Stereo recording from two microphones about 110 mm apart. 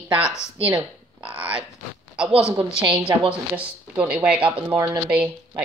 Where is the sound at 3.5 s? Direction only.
15° right (ahead or behind).